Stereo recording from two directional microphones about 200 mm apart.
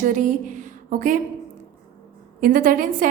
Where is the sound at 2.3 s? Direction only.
45° right (ahead or behind).